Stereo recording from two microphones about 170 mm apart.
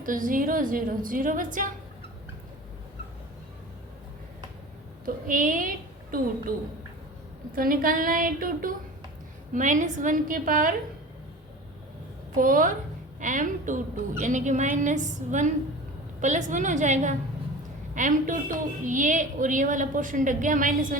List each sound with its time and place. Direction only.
0.0 s a woman's voice: 55° right (ahead or behind)
5.0 s a woman's voice: 50° right (ahead or behind)
7.5 s a woman's voice: 55° right (ahead or behind)
12.4 s a woman's voice: 55° right (ahead or behind)